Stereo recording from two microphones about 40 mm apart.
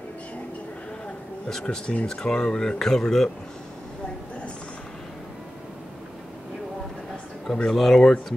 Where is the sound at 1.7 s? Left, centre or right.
Left.